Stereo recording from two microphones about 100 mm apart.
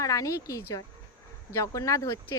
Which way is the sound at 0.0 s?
35° left (ahead or behind).